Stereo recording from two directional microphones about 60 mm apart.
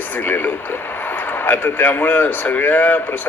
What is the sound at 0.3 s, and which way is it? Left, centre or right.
Speech, left.